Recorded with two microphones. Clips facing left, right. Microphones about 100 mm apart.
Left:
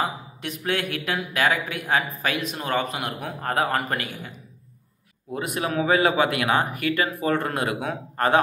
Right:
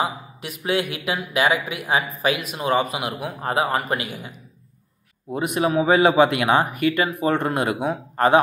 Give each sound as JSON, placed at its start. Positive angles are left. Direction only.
{"t": 0.0, "sound": "speech", "side_deg": -10}
{"t": 5.3, "sound": "speech", "side_deg": -20}